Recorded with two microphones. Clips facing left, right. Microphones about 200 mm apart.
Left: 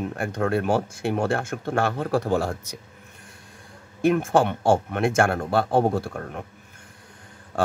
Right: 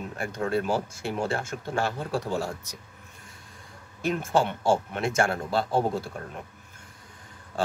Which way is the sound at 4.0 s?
55° left (ahead or behind).